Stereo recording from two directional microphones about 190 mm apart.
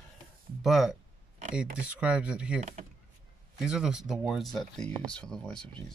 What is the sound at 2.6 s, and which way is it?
Speech, 40° right (ahead or behind).